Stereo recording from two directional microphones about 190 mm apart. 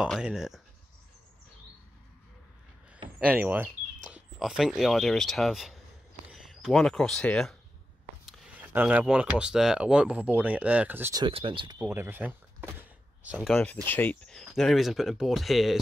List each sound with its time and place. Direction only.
0.0 s speech: 5° right (ahead or behind)
3.2 s speech: 10° right (ahead or behind)
8.3 s speech: 10° right (ahead or behind)
11.2 s speech: 25° right (ahead or behind)
11.8 s speech: 10° right (ahead or behind)